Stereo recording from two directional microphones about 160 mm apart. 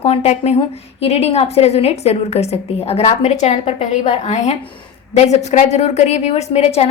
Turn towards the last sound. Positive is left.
turn(degrees=40)  # may be behind; listen again after turning